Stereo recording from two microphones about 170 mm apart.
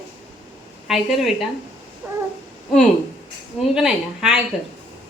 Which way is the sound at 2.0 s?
5° right (ahead or behind).